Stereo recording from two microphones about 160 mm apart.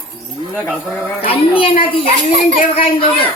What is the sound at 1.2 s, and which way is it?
A woman's voice, 35° left (ahead or behind).